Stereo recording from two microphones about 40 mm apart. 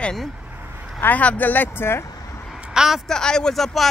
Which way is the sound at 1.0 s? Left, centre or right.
Left.